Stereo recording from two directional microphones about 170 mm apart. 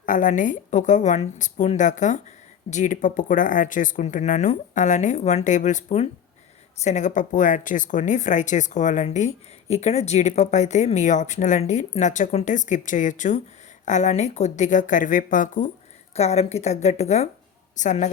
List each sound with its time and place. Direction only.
0.0 s speech: 50° left (ahead or behind)
16.1 s a woman's voice: 40° left (ahead or behind)